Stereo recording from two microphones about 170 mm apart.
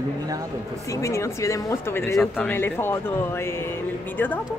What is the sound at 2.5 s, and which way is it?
Speech, 10° left (ahead or behind).